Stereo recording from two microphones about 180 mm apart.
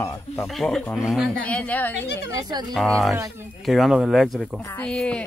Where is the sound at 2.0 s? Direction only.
70° left (ahead or behind).